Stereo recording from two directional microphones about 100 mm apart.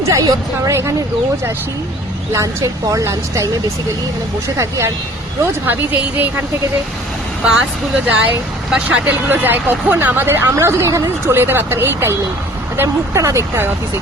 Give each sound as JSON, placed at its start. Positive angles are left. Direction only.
{"t": 0.0, "sound": "a woman's voice", "side_deg": -35}
{"t": 2.3, "sound": "a woman's voice", "side_deg": -30}
{"t": 4.5, "sound": "a woman's voice", "side_deg": -30}
{"t": 5.6, "sound": "speech", "side_deg": -20}
{"t": 7.4, "sound": "speech", "side_deg": -10}